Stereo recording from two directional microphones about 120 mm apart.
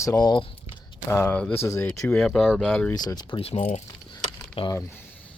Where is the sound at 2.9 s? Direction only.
35° left (ahead or behind); by 3.8 s 65° left (ahead or behind).